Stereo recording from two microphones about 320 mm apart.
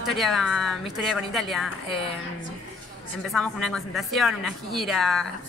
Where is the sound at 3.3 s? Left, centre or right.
Centre.